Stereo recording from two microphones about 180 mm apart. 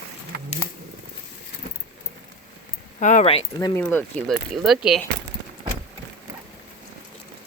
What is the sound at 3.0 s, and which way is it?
Speech, 40° left (ahead or behind).